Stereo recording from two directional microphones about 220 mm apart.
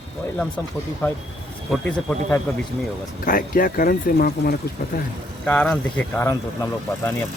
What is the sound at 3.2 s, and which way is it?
Speech, 40° left (ahead or behind).